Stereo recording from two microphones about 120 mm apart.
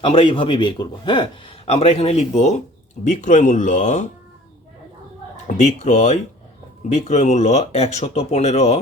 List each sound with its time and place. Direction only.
0.0 s a man's voice: 50° left (ahead or behind); by 2.6 s 70° left (ahead or behind)
3.0 s speech: 90° left
5.5 s speech: 85° left; by 8.8 s 65° left (ahead or behind)